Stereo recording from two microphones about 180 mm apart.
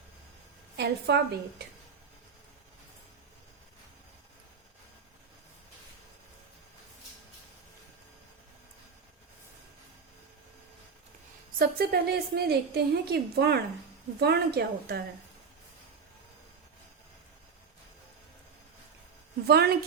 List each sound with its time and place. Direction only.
0.8 s a woman's voice: 65° right (ahead or behind)
11.6 s a woman's voice: 55° right (ahead or behind)
19.5 s a woman's voice: 60° right (ahead or behind)